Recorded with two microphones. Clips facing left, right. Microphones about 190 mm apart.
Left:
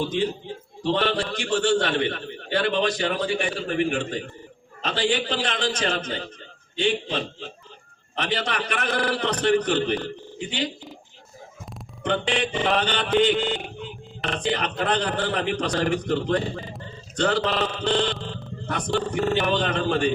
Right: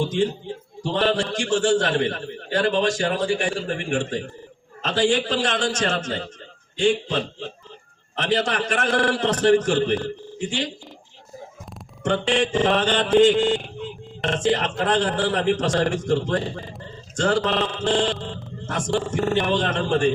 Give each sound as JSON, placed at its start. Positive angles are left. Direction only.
{"t": 0.0, "sound": "a man's voice", "side_deg": -45}
{"t": 8.3, "sound": "a man's voice", "side_deg": -45}
{"t": 12.0, "sound": "a man's voice", "side_deg": -45}